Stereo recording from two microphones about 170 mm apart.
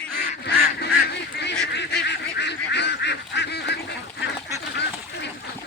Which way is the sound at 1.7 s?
85° left.